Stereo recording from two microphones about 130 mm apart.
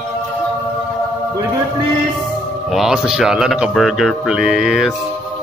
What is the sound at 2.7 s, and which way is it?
Speech, centre (ahead or behind).